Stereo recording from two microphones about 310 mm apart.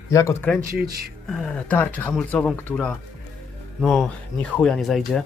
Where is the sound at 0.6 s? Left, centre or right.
Right.